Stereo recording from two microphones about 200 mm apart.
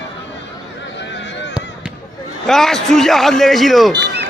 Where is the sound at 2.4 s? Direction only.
Centre (ahead or behind).